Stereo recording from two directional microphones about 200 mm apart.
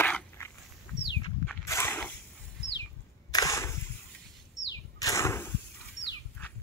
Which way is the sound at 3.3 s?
15° left (ahead or behind).